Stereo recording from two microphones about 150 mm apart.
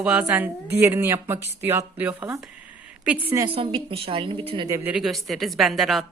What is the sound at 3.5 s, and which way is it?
Speech, 40° right (ahead or behind).